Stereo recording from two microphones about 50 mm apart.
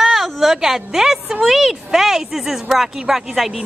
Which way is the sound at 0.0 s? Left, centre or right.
Centre.